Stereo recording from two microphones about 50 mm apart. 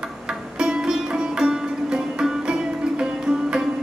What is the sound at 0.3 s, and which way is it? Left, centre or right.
Music, centre.